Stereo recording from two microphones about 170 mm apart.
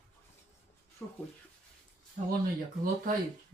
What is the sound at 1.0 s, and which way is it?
Speech, 10° left (ahead or behind).